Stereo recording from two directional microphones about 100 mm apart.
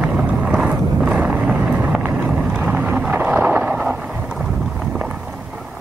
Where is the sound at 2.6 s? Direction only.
10° right (ahead or behind).